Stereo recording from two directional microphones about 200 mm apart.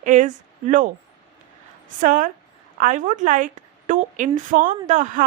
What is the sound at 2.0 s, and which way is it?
A woman's voice, 40° right (ahead or behind).